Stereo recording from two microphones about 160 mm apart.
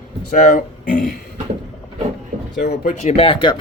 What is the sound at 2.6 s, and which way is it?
Speech, 60° left (ahead or behind).